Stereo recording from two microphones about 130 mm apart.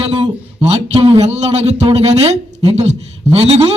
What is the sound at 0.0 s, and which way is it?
Speech, 55° right (ahead or behind).